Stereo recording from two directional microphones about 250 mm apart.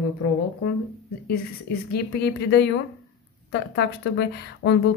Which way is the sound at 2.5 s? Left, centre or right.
Left.